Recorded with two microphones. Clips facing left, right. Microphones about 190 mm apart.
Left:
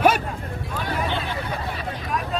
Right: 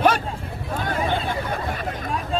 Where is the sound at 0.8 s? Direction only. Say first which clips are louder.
Right 2 dB; 45° right (ahead or behind).